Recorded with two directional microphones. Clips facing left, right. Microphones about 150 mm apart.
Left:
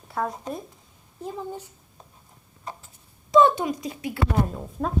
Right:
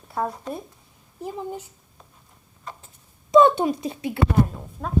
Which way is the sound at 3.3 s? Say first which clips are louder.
Right 3 dB; 25° right (ahead or behind).